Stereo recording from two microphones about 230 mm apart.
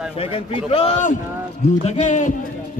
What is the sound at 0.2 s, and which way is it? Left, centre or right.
A man's voice, left.